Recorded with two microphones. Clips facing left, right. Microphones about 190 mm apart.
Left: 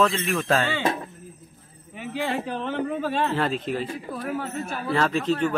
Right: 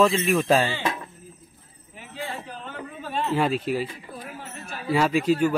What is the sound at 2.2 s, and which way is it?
A man's voice, 80° left.